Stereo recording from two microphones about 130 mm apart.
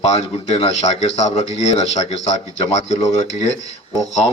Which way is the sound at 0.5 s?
50° left (ahead or behind).